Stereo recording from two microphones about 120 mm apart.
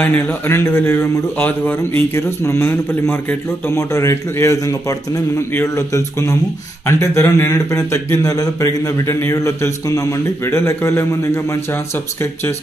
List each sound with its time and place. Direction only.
0.0 s a man's voice: 15° left (ahead or behind)